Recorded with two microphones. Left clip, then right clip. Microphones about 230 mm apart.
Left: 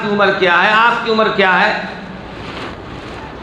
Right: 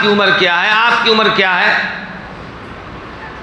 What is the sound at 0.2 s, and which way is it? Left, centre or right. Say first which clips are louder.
A man's voice: even; right.